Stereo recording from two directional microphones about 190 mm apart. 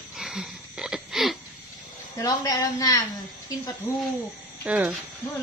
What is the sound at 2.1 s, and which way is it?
Speech, 20° left (ahead or behind).